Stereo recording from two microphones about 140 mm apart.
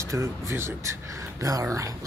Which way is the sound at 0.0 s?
20° right (ahead or behind).